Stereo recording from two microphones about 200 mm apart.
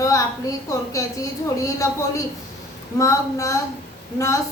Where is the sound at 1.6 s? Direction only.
15° left (ahead or behind).